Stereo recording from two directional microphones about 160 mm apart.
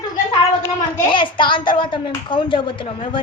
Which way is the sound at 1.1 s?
30° left (ahead or behind).